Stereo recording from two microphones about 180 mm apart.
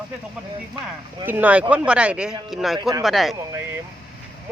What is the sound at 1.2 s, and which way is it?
Speech, 10° right (ahead or behind).